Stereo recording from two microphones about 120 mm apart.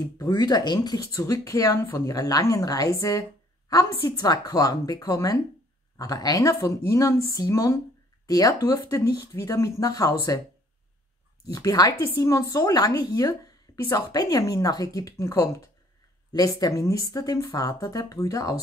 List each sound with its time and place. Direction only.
0.0 s speech: 30° left (ahead or behind)
11.5 s speech: 30° left (ahead or behind)